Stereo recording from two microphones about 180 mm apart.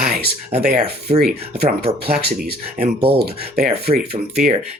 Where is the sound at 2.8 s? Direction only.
30° right (ahead or behind).